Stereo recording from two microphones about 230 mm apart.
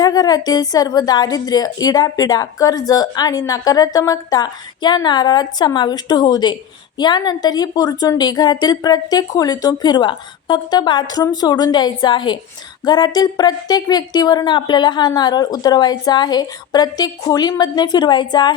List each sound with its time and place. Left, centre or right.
0.0 s a woman's voice: centre